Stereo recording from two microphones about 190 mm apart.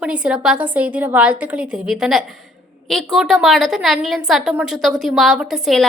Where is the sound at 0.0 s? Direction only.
5° right (ahead or behind).